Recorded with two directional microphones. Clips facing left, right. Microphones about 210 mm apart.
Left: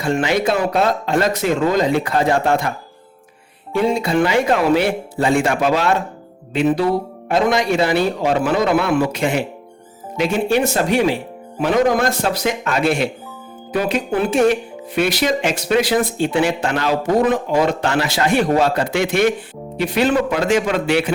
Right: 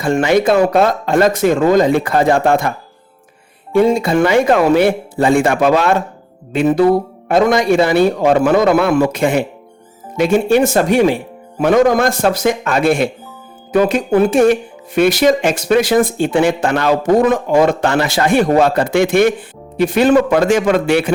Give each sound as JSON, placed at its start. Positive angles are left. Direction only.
{"t": 0.0, "sound": "speech", "side_deg": -50}
{"t": 3.7, "sound": "speech", "side_deg": -50}